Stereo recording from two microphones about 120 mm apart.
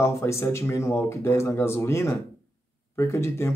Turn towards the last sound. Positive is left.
turn(degrees=20)  # may be behind; listen again after turning